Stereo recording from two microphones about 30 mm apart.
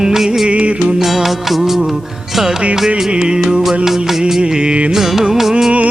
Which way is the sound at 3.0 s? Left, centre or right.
Right.